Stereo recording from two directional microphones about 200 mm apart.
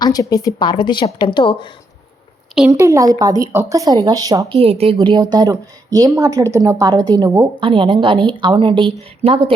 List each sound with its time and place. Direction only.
0.0 s a woman's voice: 20° left (ahead or behind)
2.7 s a woman's voice: 15° right (ahead or behind)
4.5 s a woman's voice: 30° right (ahead or behind)